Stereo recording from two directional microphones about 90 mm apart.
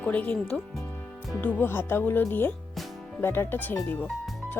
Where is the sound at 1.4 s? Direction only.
20° left (ahead or behind).